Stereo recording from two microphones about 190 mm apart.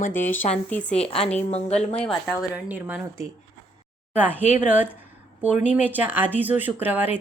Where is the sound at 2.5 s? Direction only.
10° right (ahead or behind).